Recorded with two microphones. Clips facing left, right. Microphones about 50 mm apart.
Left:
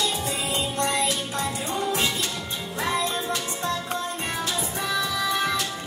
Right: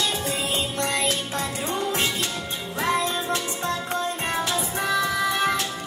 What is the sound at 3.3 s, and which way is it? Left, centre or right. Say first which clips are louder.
Music: right 1 dB; right.